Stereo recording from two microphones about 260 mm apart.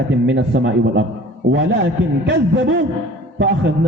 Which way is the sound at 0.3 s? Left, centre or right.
Right.